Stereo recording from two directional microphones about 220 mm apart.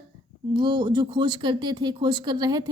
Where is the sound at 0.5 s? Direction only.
20° right (ahead or behind).